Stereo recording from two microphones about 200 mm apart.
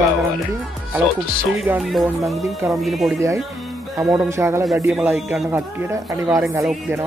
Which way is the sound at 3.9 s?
15° right (ahead or behind).